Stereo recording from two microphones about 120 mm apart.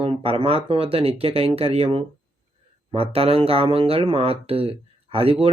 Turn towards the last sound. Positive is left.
turn(degrees=-50)  # may be behind; listen again after turning